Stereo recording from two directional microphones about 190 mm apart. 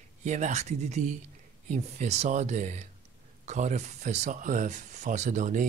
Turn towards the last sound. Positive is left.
turn(degrees=-40)  # may be behind; listen again after turning